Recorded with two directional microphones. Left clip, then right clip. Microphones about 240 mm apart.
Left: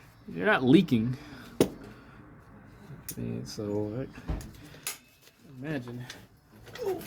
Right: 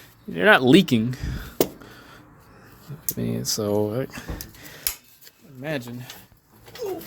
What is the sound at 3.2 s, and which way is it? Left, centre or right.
Speech, right.